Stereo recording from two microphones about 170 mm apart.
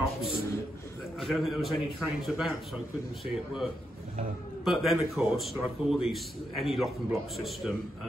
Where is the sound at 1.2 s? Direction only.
Centre (ahead or behind).